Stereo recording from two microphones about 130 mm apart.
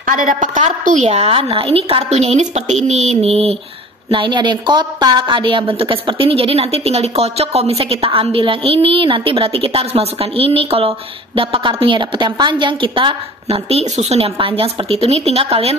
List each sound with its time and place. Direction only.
0.0 s a woman's voice: 90° right; by 2.0 s 45° right (ahead or behind)
2.0 s a woman's voice: 60° right (ahead or behind)
4.1 s a woman's voice: 40° right (ahead or behind)